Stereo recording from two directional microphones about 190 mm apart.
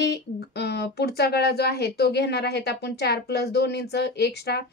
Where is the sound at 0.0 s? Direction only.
60° left (ahead or behind).